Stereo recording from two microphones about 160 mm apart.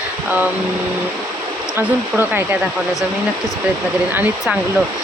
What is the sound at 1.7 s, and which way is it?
Speech, 10° right (ahead or behind).